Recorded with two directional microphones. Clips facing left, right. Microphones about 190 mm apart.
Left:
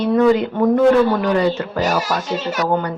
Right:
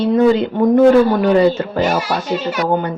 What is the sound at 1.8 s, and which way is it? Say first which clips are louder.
Speech: right 1 dB; 45° left (ahead or behind).